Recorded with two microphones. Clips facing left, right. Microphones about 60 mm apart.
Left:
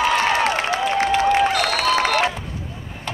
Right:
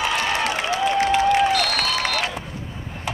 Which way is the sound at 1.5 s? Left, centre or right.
Centre.